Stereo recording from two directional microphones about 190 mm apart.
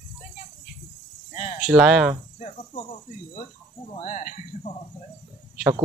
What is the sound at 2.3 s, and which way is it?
Cricket, 35° left (ahead or behind).